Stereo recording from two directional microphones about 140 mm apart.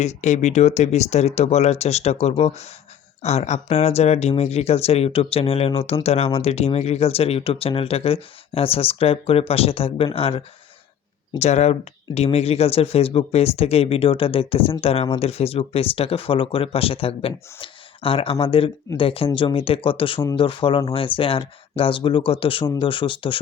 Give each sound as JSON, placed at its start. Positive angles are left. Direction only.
{"t": 0.0, "sound": "speech", "side_deg": 55}